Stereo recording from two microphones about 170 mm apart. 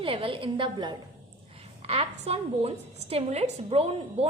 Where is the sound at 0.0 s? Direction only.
30° right (ahead or behind).